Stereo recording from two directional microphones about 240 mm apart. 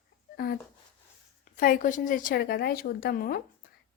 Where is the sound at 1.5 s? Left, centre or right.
Left.